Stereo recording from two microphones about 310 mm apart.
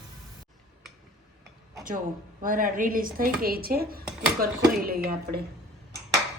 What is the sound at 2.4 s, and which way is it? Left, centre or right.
Speech, right.